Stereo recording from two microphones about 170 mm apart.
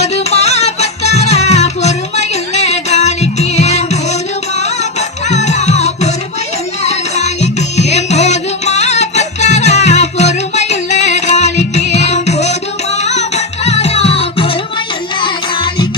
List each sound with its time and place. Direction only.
0.0 s music: 40° left (ahead or behind)